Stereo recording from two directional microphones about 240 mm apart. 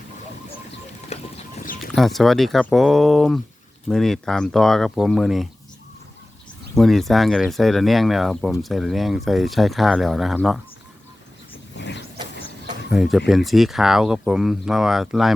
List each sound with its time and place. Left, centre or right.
1.1 s boat: left
1.8 s speech: centre
6.7 s speech: centre
11.8 s vehicle: left
12.9 s speech: centre